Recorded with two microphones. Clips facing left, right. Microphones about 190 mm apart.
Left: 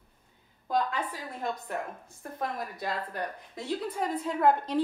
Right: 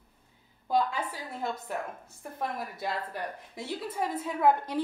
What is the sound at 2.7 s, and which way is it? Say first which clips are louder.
Speech: even; 5° right (ahead or behind).